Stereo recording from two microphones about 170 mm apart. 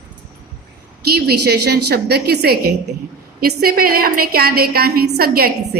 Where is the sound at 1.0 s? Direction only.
65° right (ahead or behind).